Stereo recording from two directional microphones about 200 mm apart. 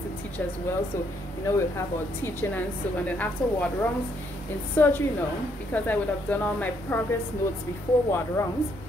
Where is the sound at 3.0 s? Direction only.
10° left (ahead or behind).